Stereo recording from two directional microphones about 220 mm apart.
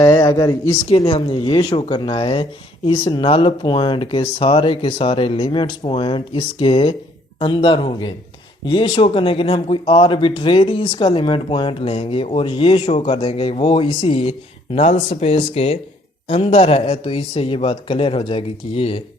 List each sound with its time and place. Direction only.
0.0 s speech: 20° left (ahead or behind)